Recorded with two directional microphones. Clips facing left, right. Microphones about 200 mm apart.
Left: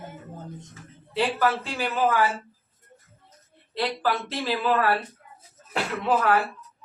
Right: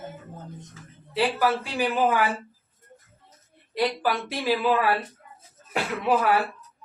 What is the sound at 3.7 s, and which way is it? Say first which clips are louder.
A man's voice: right 1 dB; 15° right (ahead or behind).